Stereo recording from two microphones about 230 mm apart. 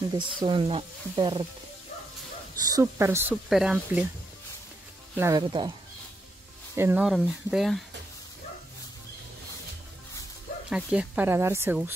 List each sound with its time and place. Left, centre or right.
0.1 s speech: centre
2.6 s speech: centre
5.1 s speech: centre
6.7 s speech: centre
10.7 s speech: centre